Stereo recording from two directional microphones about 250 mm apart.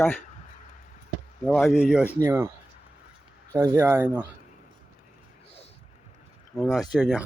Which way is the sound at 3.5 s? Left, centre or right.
Centre.